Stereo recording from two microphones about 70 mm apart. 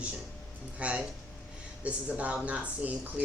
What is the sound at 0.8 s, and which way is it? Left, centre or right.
Speech, centre.